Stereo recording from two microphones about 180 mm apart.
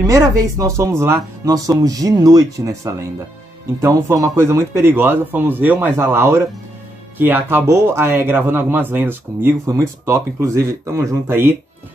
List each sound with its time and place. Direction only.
0.0 s speech: 20° right (ahead or behind)